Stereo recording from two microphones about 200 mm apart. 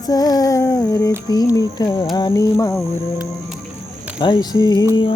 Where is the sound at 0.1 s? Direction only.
20° left (ahead or behind).